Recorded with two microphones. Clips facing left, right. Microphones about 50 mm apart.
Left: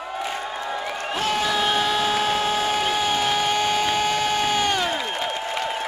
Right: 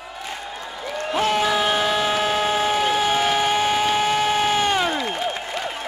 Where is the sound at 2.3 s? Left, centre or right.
Centre.